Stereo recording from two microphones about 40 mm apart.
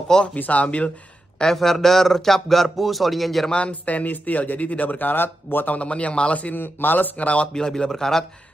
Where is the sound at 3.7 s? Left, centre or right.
Left.